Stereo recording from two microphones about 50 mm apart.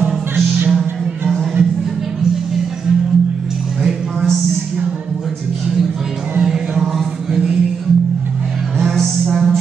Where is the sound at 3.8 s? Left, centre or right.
Centre.